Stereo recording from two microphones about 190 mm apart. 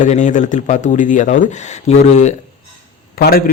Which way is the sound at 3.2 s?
50° left (ahead or behind).